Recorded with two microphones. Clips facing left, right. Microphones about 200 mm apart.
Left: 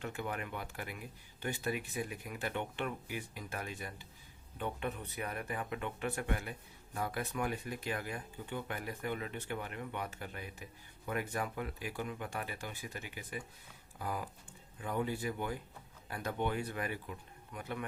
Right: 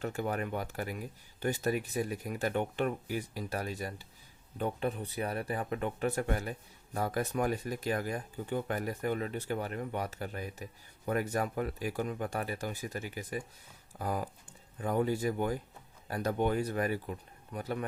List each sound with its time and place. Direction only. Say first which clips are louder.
0.0 s speech: right 6 dB; 40° right (ahead or behind)